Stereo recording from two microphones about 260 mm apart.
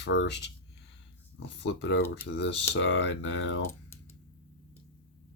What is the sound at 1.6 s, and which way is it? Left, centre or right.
Speech, left.